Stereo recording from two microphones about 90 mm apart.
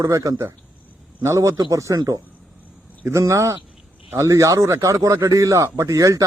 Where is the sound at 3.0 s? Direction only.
30° right (ahead or behind).